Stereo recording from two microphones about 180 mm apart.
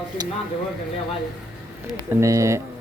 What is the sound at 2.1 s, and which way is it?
Speech, 15° right (ahead or behind).